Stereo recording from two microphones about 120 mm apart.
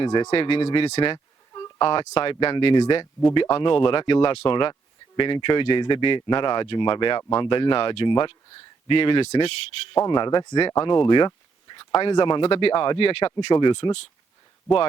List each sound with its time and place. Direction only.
0.0 s speech: 40° left (ahead or behind)
0.3 s speech: 50° left (ahead or behind)
1.1 s a sound: 35° left (ahead or behind)
1.8 s speech: 50° left (ahead or behind)
10.0 s speech: 40° left (ahead or behind)
13.5 s speech: 40° left (ahead or behind)